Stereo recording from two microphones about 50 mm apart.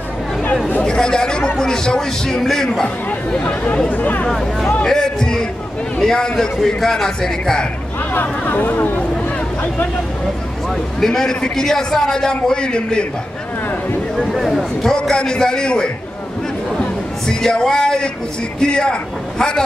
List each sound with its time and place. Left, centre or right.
0.8 s a man's voice: centre
3.9 s speech: left
4.8 s a man's voice: centre
8.1 s speech: left
11.0 s a man's voice: centre
14.1 s speech: centre
14.8 s a man's voice: centre
17.4 s a man's voice: centre